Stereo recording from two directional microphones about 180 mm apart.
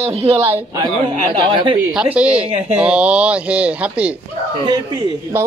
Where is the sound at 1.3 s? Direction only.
25° right (ahead or behind).